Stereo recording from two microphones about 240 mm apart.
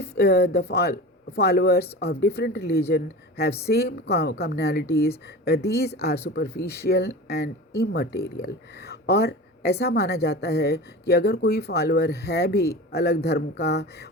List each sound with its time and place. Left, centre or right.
0.0 s a woman's voice: left